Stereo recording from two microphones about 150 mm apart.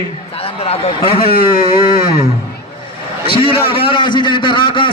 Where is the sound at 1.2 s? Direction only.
80° left.